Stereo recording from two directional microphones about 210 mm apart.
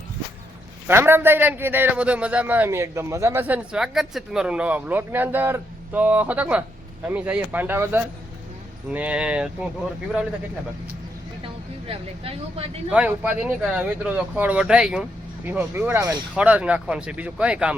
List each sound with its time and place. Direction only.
0.9 s a man's voice: 10° right (ahead or behind)
11.4 s speech: 25° right (ahead or behind)
12.9 s a man's voice: 5° right (ahead or behind)